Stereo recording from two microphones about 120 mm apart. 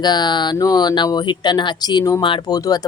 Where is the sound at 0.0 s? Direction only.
35° left (ahead or behind).